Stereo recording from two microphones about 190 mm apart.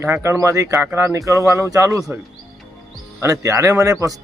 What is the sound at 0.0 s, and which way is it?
A man's voice, 15° right (ahead or behind).